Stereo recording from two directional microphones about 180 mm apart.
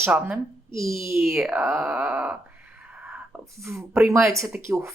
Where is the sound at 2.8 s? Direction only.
10° right (ahead or behind).